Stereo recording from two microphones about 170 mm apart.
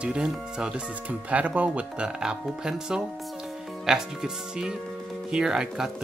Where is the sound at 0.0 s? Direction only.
5° right (ahead or behind).